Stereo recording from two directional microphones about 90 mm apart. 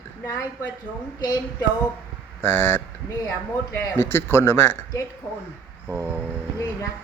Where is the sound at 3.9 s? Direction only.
25° left (ahead or behind).